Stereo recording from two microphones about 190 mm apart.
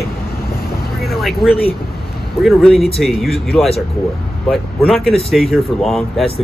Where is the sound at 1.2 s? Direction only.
Centre (ahead or behind).